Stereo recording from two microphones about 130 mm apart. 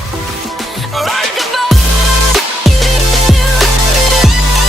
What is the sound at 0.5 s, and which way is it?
Music, centre (ahead or behind).